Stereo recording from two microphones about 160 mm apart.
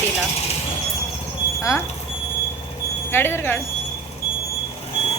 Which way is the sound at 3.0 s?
15° left (ahead or behind).